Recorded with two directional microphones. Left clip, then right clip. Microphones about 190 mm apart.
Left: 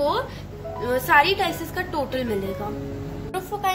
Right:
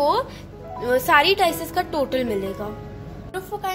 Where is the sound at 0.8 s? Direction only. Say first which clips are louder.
Right 1 dB; 35° right (ahead or behind).